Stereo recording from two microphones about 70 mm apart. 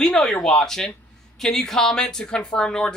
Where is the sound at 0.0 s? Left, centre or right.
Centre.